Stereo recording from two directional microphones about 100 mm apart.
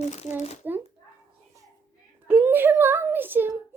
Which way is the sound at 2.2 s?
20° right (ahead or behind).